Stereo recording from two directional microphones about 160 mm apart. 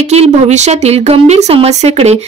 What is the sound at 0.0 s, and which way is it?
Speech, 45° right (ahead or behind).